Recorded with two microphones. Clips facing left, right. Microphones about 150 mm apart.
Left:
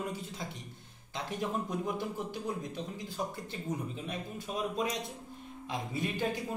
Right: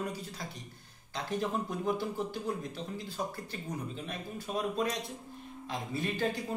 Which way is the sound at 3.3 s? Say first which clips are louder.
Even; 20° left (ahead or behind).